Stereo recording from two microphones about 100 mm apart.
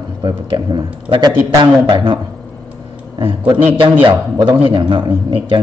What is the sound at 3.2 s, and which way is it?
Speech, 60° right (ahead or behind).